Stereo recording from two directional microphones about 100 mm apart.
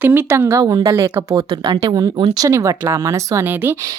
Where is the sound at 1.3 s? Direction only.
45° right (ahead or behind).